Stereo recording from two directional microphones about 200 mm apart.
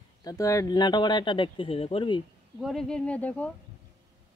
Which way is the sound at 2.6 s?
Centre (ahead or behind).